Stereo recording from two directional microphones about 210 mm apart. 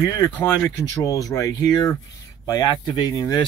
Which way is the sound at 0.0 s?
15° left (ahead or behind).